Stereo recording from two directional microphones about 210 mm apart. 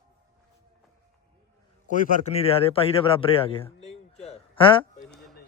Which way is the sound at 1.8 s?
40° left (ahead or behind).